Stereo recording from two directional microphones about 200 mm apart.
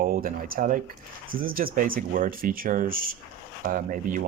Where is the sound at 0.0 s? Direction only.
45° right (ahead or behind).